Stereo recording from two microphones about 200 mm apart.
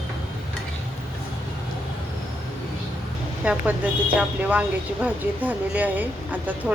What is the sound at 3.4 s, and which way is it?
Speech, 10° right (ahead or behind).